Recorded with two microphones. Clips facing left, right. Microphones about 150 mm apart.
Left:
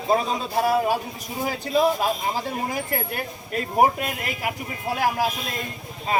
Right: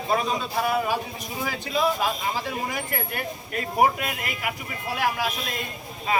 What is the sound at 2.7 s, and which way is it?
A man's voice, 35° left (ahead or behind).